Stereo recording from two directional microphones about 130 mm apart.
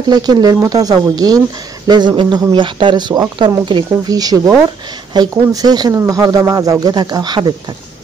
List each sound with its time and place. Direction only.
0.1 s speech: 30° right (ahead or behind)